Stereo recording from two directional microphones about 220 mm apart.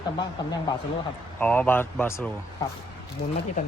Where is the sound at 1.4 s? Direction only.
5° left (ahead or behind).